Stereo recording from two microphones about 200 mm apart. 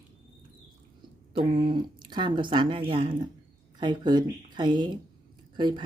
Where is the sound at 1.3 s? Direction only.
25° right (ahead or behind).